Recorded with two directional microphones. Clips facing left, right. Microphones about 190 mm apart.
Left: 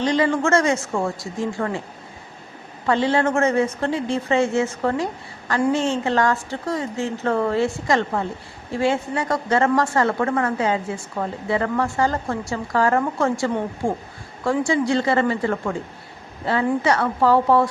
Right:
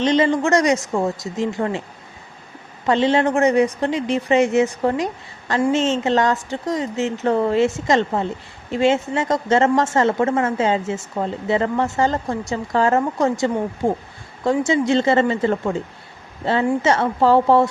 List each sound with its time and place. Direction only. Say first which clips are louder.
0.0 s a woman's voice: right 2 dB; 20° right (ahead or behind)
2.8 s a woman's voice: right 2 dB; 20° right (ahead or behind)